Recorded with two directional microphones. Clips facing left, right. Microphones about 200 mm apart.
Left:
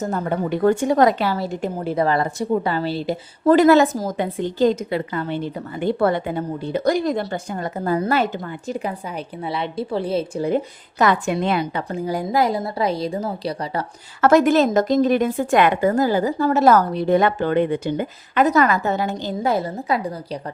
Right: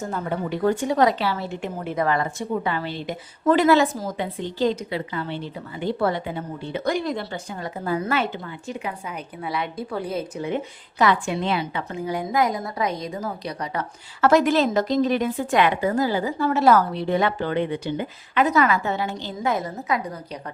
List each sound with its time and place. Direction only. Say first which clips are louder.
0.0 s a woman's voice: left 4 dB; 45° left (ahead or behind)
7.9 s a woman's voice: left 4 dB; 35° left (ahead or behind)
14.2 s a woman's voice: left 3 dB; 50° left (ahead or behind); by 20.4 s 30° left (ahead or behind)